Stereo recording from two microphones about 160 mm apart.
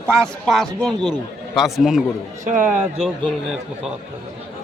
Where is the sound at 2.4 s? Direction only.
55° right (ahead or behind).